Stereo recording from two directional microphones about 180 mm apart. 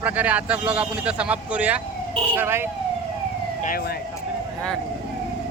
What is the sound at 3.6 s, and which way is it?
Speech, 55° left (ahead or behind).